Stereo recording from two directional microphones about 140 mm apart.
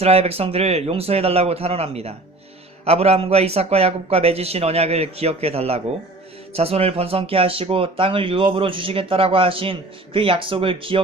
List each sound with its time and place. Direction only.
0.0 s a man's voice: 45° right (ahead or behind)